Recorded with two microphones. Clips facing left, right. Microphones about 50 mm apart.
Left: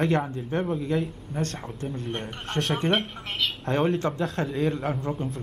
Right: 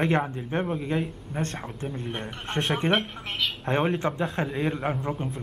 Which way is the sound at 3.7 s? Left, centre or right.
Centre.